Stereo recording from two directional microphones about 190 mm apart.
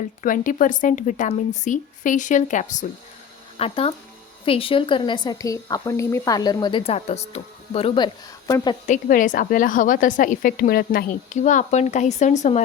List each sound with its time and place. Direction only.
0.2 s a woman's voice: 45° left (ahead or behind); by 8.7 s 20° left (ahead or behind)
8.9 s a woman's voice: 45° left (ahead or behind)